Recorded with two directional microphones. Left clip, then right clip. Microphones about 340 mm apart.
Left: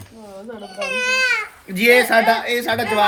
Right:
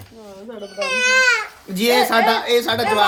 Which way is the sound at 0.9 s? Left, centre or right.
Right.